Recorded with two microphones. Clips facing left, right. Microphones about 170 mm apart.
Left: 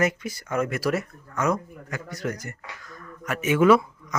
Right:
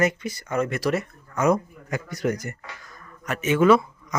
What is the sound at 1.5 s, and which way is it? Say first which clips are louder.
A man's voice: right 7 dB; 15° right (ahead or behind).